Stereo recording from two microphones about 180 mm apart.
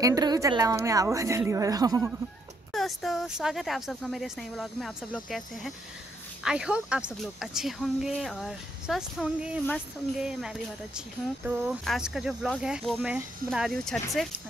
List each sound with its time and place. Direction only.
0.0 s a woman's voice: 20° right (ahead or behind)
2.7 s speech: centre (ahead or behind)